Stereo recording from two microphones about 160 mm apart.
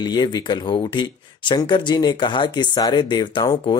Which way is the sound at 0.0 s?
25° left (ahead or behind).